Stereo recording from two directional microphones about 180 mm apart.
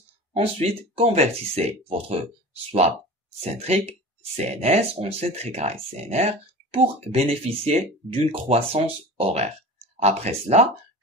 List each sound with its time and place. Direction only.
0.4 s speech: 35° right (ahead or behind)
3.5 s speech: 35° right (ahead or behind)